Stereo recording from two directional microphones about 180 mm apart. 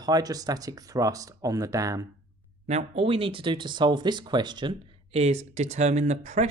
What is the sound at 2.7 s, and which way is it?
Speech, 35° right (ahead or behind).